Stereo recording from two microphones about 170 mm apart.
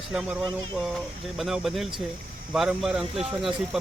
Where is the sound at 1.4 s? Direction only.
Centre (ahead or behind).